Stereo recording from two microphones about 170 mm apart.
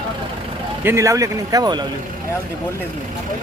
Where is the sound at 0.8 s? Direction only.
15° right (ahead or behind).